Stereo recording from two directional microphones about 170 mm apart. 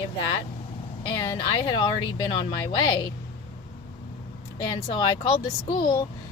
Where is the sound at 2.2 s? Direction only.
25° left (ahead or behind).